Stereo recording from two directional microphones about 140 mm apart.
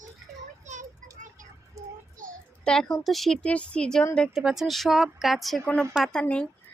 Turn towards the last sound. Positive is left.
turn(degrees=5)  # may be behind; listen again after turning